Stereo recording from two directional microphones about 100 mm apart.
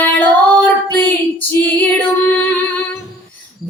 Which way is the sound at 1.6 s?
20° left (ahead or behind).